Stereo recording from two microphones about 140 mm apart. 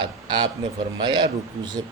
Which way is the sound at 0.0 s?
35° right (ahead or behind).